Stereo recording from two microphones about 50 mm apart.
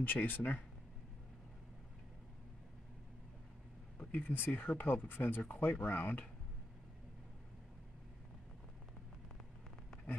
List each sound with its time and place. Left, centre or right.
0.0 s speech: left
4.0 s a sound: left
4.3 s speech: left